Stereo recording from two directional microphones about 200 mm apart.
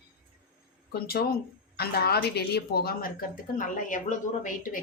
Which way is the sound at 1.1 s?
50° left (ahead or behind).